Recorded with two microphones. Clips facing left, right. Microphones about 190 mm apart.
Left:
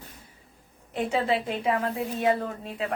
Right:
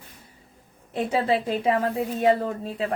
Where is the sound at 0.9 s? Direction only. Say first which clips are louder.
Right 2 dB; 35° right (ahead or behind).